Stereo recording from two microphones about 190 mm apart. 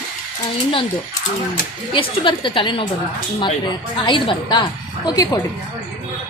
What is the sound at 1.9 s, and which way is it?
A woman's voice, 25° left (ahead or behind).